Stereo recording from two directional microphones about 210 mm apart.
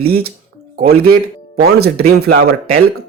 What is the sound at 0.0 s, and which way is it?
Speech, 45° right (ahead or behind).